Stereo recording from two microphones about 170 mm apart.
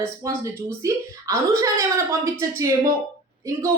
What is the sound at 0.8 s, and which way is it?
A woman's voice, 20° right (ahead or behind).